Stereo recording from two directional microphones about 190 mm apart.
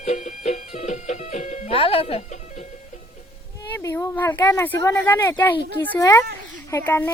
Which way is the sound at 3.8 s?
10° left (ahead or behind).